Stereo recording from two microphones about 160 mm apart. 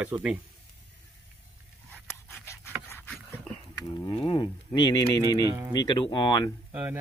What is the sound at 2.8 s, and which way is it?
Dog, 15° left (ahead or behind).